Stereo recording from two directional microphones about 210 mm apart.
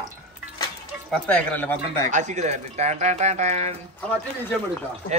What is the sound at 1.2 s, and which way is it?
Speech, 5° left (ahead or behind).